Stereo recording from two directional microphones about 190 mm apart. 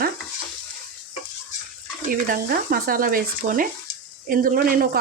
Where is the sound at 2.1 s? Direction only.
50° right (ahead or behind).